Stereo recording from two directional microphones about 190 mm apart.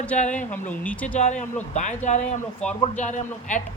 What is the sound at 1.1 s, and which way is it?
A man's voice, 40° left (ahead or behind).